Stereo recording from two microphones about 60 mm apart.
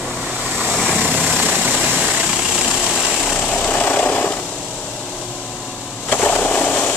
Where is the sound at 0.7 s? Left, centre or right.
Centre.